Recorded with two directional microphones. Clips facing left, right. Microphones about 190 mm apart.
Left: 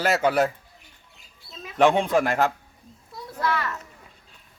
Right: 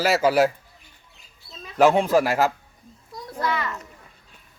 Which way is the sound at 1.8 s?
5° right (ahead or behind).